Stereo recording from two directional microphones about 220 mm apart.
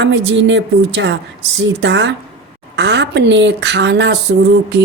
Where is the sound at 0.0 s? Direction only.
55° right (ahead or behind).